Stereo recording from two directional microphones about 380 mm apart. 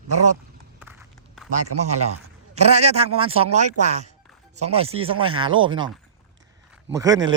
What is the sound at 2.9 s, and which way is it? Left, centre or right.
A man's voice, centre.